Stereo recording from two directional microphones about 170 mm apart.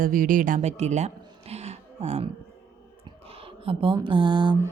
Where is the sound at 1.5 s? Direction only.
40° right (ahead or behind).